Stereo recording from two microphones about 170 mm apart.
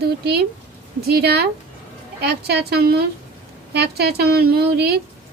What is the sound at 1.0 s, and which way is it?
A woman's voice, 70° right (ahead or behind).